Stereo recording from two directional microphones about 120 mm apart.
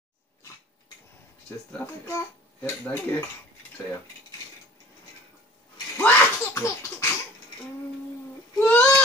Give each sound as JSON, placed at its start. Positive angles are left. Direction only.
{"t": 2.8, "sound": "speech", "side_deg": 20}
{"t": 5.9, "sound": "a sound", "side_deg": 20}
{"t": 8.6, "sound": "baby cry", "side_deg": 10}